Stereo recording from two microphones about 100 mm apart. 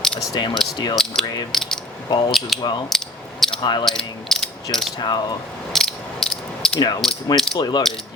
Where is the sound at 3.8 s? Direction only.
5° left (ahead or behind).